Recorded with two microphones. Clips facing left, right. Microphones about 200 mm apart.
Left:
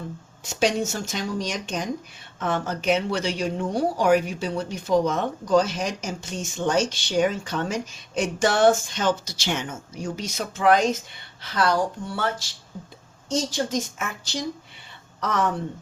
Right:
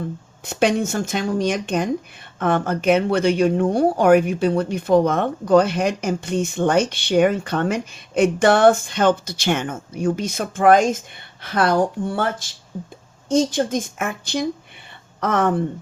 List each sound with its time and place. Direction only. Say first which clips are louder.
0.4 s a woman's voice: right 4 dB; 55° right (ahead or behind)